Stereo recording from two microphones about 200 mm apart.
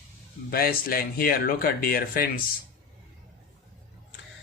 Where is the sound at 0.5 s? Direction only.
50° left (ahead or behind).